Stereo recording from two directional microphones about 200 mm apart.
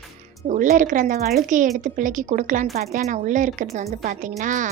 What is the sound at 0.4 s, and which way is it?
A woman's voice, 40° right (ahead or behind).